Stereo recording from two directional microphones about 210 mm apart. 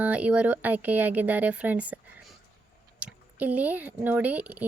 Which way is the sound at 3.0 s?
5° right (ahead or behind).